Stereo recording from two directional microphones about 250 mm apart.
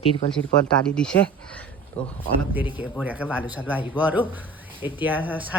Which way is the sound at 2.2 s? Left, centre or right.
Centre.